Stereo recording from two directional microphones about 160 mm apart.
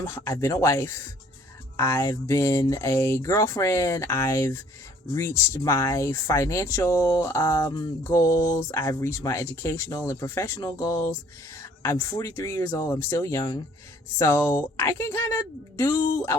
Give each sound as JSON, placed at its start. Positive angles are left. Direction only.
{"t": 0.0, "sound": "speech", "side_deg": 15}